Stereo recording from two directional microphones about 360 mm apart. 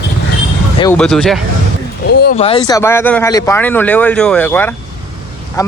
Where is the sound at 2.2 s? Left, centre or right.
Left.